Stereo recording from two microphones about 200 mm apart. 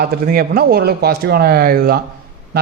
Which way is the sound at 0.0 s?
50° right (ahead or behind).